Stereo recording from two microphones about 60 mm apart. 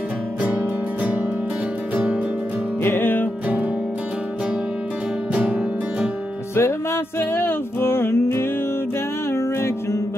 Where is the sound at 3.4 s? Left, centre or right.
Right.